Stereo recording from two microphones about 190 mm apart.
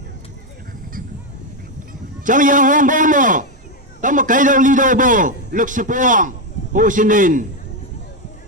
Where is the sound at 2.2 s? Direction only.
45° right (ahead or behind).